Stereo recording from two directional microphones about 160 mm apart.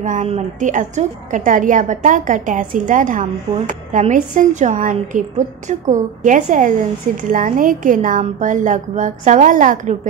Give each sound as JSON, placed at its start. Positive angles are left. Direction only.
{"t": 0.0, "sound": "a woman's voice", "side_deg": -50}